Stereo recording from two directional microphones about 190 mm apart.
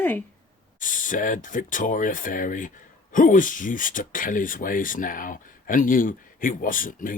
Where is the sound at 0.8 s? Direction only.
45° left (ahead or behind).